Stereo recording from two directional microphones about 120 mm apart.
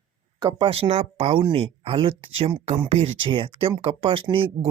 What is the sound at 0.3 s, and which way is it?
Speech, 40° right (ahead or behind).